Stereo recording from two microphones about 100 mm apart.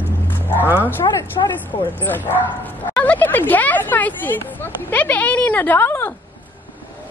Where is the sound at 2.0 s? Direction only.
20° left (ahead or behind).